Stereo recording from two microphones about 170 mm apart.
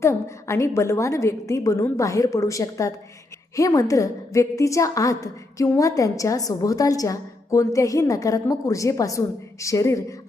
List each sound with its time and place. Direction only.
0.0 s a woman's voice: 15° left (ahead or behind)